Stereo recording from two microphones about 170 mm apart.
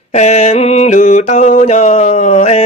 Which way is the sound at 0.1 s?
40° left (ahead or behind).